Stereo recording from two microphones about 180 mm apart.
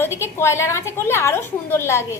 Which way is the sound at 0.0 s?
15° left (ahead or behind).